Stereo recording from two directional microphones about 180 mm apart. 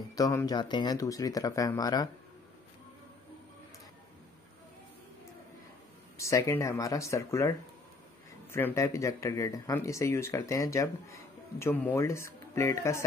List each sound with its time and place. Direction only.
0.1 s speech: 15° left (ahead or behind)
6.1 s speech: 15° left (ahead or behind)